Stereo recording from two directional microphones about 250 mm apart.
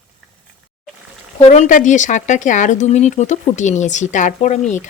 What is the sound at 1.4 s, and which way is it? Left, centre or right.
Speech, left.